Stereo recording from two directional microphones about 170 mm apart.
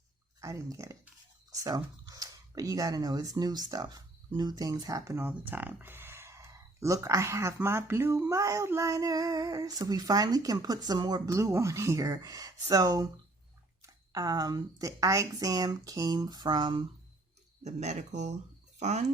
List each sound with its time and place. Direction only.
0.4 s speech: 20° right (ahead or behind)
17.6 s speech: 40° right (ahead or behind)